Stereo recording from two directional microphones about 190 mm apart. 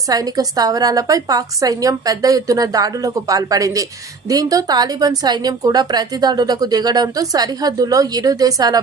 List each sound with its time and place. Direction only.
0.1 s a woman's voice: 20° right (ahead or behind)